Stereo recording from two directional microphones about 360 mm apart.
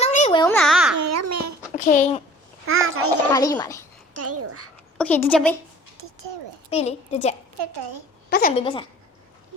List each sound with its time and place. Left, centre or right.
0.0 s a sound: centre
0.9 s babbling: right
1.7 s a child's voice: left
2.6 s a child's voice: right
3.3 s a woman's voice: centre
4.1 s a child's voice: right
4.9 s a woman's voice: centre
6.7 s a woman's voice: centre
7.7 s a woman's voice: right
8.3 s a woman's voice: left